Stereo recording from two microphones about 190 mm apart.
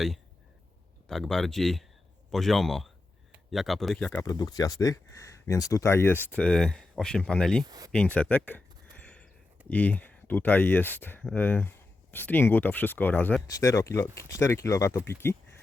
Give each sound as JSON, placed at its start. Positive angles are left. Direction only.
{"t": 1.0, "sound": "speech", "side_deg": 0}
{"t": 4.2, "sound": "speech", "side_deg": 20}
{"t": 7.6, "sound": "speech", "side_deg": -20}
{"t": 7.9, "sound": "a sound", "side_deg": 5}
{"t": 9.6, "sound": "speech", "side_deg": 10}